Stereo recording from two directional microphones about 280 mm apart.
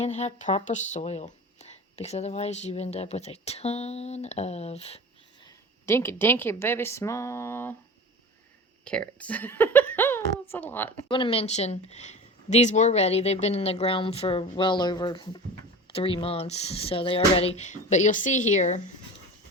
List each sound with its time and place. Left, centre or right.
0.0 s speech: left
5.8 s speech: centre
8.8 s speech: centre
11.1 s speech: centre